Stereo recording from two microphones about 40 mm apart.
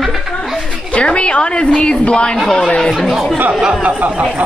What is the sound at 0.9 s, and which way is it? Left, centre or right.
A woman's voice, left.